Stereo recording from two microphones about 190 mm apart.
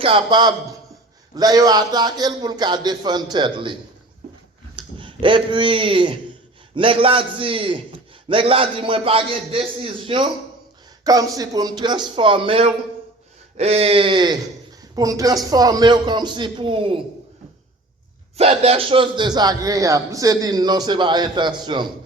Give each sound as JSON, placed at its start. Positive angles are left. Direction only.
{"t": 0.0, "sound": "a man's voice", "side_deg": -25}
{"t": 4.8, "sound": "a man's voice", "side_deg": -25}
{"t": 18.3, "sound": "a man's voice", "side_deg": -35}